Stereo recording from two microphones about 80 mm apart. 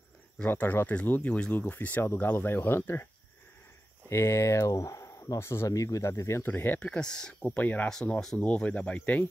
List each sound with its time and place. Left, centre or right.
0.5 s speech: left
4.1 s speech: left
6.4 s speech: left; by 7.3 s centre
7.4 s speech: left
7.9 s speech: centre